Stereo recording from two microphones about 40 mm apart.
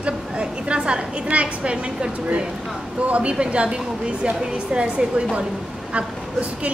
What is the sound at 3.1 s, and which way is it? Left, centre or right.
A woman's voice, right.